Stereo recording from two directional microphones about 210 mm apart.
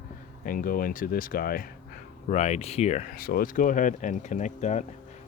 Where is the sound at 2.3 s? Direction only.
35° left (ahead or behind).